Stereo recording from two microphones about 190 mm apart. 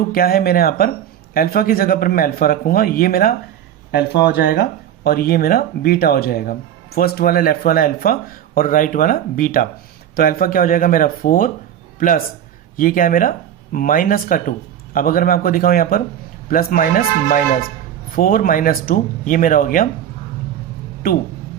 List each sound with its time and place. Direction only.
0.1 s speech: 50° left (ahead or behind)
21.0 s speech: 50° left (ahead or behind)